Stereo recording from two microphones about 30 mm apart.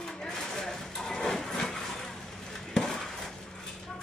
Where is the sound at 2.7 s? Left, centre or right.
Centre.